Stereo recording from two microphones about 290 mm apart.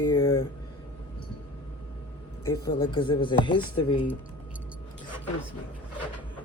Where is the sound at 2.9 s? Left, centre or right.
Centre.